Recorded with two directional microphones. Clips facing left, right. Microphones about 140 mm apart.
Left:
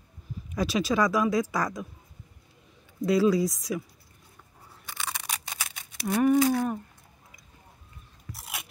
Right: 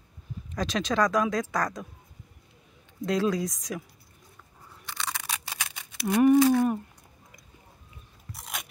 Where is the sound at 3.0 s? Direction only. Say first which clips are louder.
Left 4 dB; 5° left (ahead or behind).